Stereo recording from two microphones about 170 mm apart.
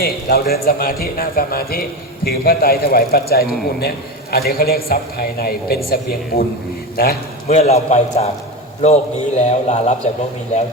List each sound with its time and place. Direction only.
0.0 s a man's voice: 65° left (ahead or behind)
7.4 s a man's voice: 40° left (ahead or behind)